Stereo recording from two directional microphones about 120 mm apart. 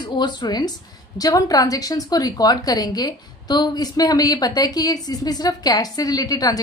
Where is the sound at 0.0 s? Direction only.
40° left (ahead or behind).